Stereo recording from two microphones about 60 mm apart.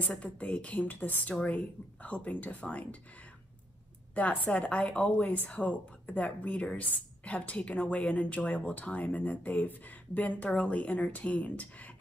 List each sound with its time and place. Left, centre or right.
0.1 s speech: centre
4.1 s speech: left